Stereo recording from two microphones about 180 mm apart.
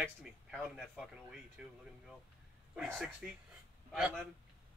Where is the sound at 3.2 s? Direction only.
5° right (ahead or behind).